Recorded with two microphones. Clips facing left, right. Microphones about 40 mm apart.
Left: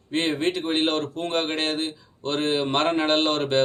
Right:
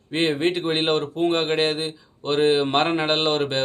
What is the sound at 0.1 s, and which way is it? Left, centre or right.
Speech, centre.